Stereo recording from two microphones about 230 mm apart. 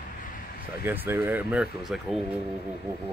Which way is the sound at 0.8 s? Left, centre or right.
Centre.